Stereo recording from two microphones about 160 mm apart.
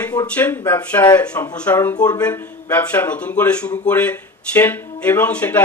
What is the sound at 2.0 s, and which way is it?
Speech, 25° left (ahead or behind).